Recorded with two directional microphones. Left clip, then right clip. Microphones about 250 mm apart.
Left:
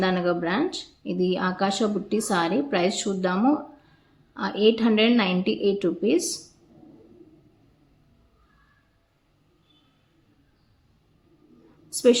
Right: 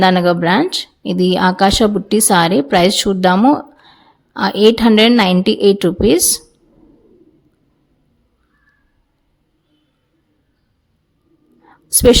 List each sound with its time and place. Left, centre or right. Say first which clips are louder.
0.0 s a woman's voice: right 12 dB; right
11.9 s whispering: right 9 dB; right